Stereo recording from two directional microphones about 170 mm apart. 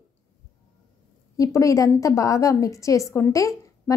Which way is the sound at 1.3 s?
20° left (ahead or behind).